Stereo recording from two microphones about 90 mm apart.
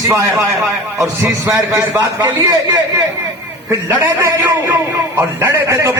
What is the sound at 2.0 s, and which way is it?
Speech, 50° right (ahead or behind).